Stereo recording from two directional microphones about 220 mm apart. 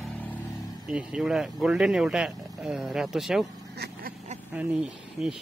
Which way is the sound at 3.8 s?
50° right (ahead or behind).